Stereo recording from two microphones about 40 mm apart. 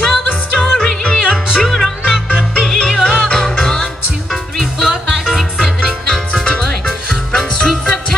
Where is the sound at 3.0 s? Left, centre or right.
Left.